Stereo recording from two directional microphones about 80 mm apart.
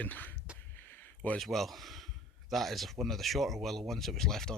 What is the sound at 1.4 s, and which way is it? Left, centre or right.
Speech, centre.